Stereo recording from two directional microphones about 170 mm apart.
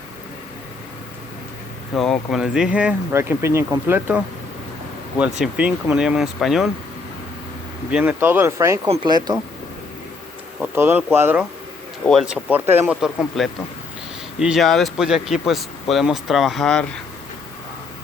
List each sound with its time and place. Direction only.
2.0 s speech: centre (ahead or behind)
5.4 s speech: 5° right (ahead or behind)
7.9 s speech: 10° right (ahead or behind); by 9.4 s 25° right (ahead or behind)
10.6 s speech: 10° right (ahead or behind)